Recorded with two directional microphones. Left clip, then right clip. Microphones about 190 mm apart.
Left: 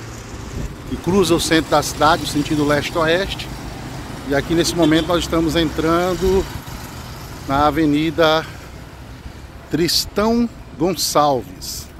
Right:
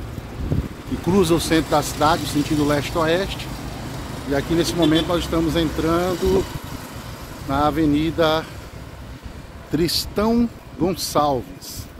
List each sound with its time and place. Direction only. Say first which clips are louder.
1.0 s speech: left 2 dB; 10° right (ahead or behind)
4.3 s speech: left 3 dB; 5° left (ahead or behind)
7.4 s speech: left 3 dB; 10° left (ahead or behind)
9.7 s speech: left 3 dB; centre (ahead or behind)